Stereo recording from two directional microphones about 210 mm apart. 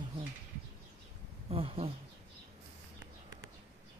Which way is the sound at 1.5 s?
25° right (ahead or behind).